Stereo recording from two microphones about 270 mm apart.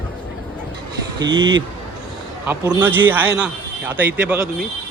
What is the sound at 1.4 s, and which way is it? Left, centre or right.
Speech, right.